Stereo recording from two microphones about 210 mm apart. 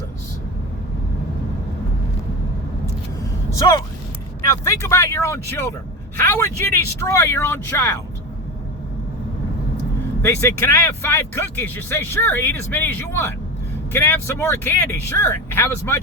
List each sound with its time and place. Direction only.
3.5 s speech: 15° left (ahead or behind)
10.2 s speech: 15° left (ahead or behind)